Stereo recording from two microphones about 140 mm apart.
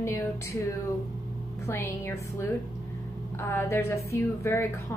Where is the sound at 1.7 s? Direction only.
15° left (ahead or behind).